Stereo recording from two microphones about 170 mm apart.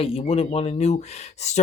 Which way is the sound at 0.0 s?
35° left (ahead or behind).